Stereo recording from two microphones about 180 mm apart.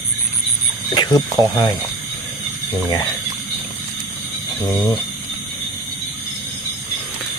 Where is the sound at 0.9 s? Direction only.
20° left (ahead or behind).